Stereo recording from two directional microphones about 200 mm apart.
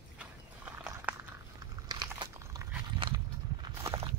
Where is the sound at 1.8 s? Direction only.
20° right (ahead or behind).